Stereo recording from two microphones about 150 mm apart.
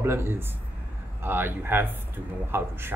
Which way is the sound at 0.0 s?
15° right (ahead or behind).